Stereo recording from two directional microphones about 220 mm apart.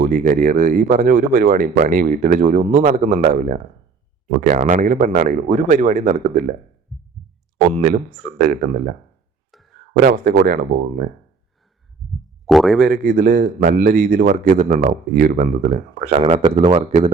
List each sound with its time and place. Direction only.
0.0 s a man's voice: 35° right (ahead or behind)
7.7 s a man's voice: 35° right (ahead or behind)
9.5 s a sound: centre (ahead or behind)
9.9 s a man's voice: 40° right (ahead or behind)
12.5 s speech: centre (ahead or behind)
12.9 s a man's voice: 40° right (ahead or behind)